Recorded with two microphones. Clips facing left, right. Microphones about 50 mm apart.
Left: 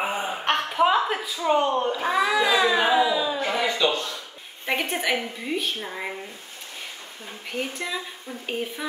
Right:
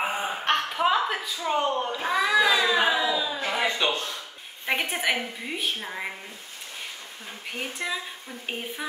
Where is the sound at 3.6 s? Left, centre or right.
Right.